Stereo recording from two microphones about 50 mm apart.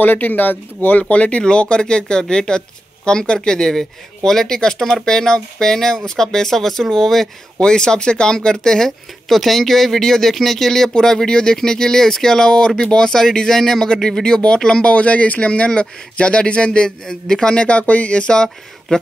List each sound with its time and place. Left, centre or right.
0.0 s speech: left; by 18.9 s centre